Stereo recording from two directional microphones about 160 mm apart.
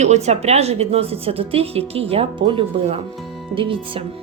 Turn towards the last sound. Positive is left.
turn(degrees=-35)  # may be behind; listen again after turning